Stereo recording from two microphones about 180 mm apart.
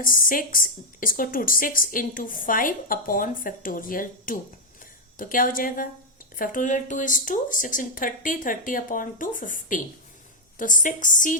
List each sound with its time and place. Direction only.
0.0 s a woman's voice: 50° left (ahead or behind)